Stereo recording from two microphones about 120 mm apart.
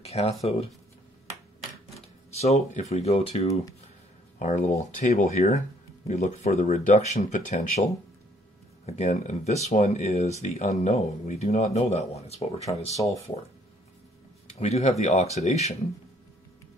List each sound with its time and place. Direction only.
0.0 s speech: 55° left (ahead or behind)
2.3 s speech: 65° left (ahead or behind)
4.4 s a man's voice: 85° left; by 10.3 s 70° left (ahead or behind)
10.4 s a man's voice: 85° left; by 12.4 s 65° left (ahead or behind)
14.5 s a man's voice: 65° left (ahead or behind)